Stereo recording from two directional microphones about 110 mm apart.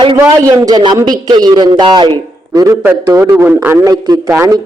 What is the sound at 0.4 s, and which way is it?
A man's voice, 30° right (ahead or behind).